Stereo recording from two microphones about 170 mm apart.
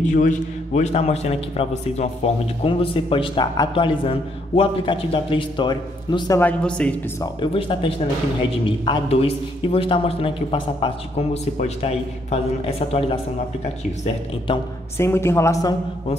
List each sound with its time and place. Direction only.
0.0 s a man's voice: 45° left (ahead or behind); by 6.4 s 25° left (ahead or behind)
6.4 s a woman's voice: 5° left (ahead or behind)
7.3 s a man's voice: 30° left (ahead or behind)
15.0 s a woman's voice: 15° left (ahead or behind)